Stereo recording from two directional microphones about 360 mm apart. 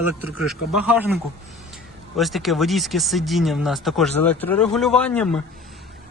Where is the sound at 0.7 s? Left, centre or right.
Centre.